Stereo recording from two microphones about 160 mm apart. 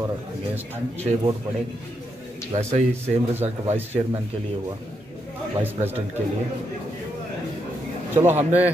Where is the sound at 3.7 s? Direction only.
15° right (ahead or behind).